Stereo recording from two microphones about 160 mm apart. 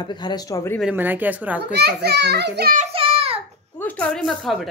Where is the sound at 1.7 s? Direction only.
90° right.